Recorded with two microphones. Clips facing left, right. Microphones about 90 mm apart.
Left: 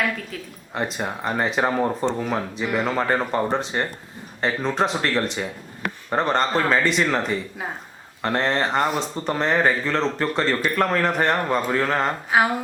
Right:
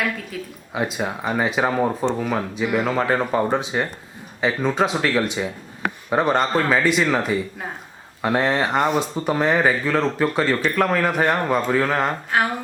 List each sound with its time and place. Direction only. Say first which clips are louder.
0.0 s speech: even; 5° right (ahead or behind)